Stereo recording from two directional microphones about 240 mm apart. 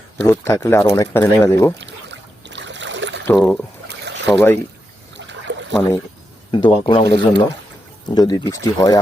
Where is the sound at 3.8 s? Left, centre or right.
Right.